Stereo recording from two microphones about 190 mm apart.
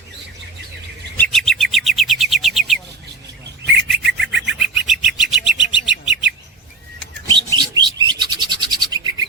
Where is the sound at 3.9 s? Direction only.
Centre (ahead or behind).